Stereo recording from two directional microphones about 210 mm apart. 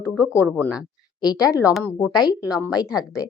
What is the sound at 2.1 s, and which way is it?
A woman's voice, 20° left (ahead or behind).